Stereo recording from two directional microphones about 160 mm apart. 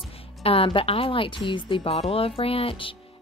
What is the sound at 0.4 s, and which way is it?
A woman's voice, 35° left (ahead or behind).